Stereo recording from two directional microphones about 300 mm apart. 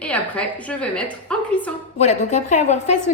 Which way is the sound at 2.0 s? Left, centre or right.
Left.